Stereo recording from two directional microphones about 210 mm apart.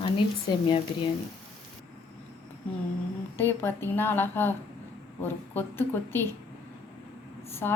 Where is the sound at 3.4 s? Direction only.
10° left (ahead or behind).